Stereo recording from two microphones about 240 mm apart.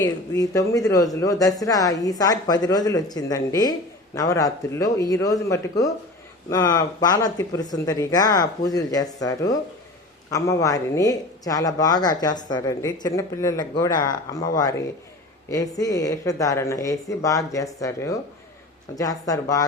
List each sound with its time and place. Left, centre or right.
0.0 s speech: centre